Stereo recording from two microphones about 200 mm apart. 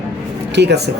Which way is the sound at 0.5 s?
55° right (ahead or behind).